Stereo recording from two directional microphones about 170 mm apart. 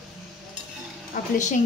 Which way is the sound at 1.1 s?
45° left (ahead or behind).